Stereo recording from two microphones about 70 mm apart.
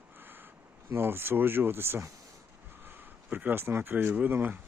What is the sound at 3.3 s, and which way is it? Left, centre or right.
Speech, right.